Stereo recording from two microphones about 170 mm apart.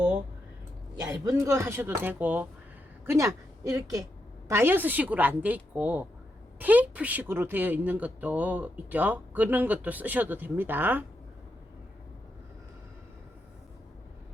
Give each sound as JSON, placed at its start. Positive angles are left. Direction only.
{"t": 1.0, "sound": "a woman's voice", "side_deg": -20}